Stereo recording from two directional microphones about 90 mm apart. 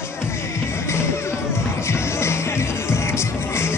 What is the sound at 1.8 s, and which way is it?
Music, 30° left (ahead or behind).